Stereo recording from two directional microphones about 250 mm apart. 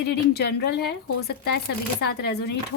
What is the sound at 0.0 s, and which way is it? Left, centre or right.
Speech, left.